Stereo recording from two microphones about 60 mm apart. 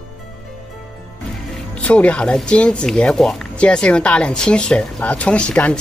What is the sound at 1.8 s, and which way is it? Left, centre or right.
Speech, left.